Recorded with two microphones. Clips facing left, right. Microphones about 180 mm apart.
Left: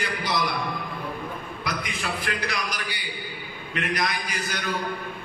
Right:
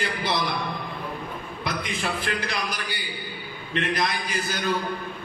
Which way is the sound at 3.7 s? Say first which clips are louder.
Right 2 dB; 30° right (ahead or behind).